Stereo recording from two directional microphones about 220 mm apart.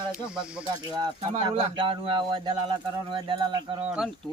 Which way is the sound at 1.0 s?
25° right (ahead or behind).